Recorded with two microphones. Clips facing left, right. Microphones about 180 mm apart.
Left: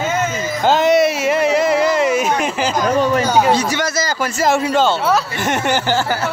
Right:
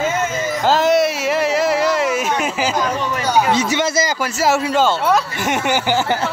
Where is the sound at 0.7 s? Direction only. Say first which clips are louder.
Left 2 dB; centre (ahead or behind).